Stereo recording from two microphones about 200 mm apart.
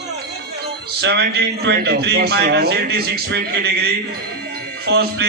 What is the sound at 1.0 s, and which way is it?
Speech, 60° right (ahead or behind).